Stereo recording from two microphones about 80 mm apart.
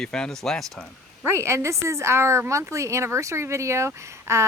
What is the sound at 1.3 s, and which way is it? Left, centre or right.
Speech, right.